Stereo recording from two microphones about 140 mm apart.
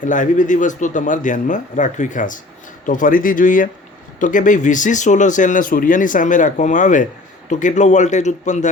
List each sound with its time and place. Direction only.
0.0 s speech: 65° left (ahead or behind)